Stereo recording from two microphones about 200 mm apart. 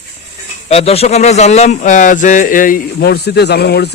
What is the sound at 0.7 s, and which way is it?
Speech, 30° left (ahead or behind).